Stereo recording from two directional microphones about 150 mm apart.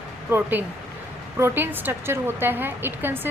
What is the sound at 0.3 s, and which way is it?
A woman's voice, 15° right (ahead or behind).